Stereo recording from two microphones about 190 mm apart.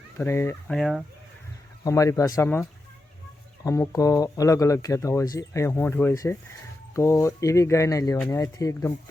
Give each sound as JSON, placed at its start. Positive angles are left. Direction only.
{"t": 0.2, "sound": "speech", "side_deg": 10}
{"t": 0.8, "sound": "speech", "side_deg": 0}
{"t": 1.8, "sound": "speech", "side_deg": 15}